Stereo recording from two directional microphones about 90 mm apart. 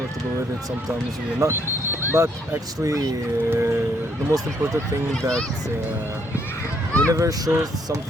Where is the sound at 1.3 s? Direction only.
35° right (ahead or behind).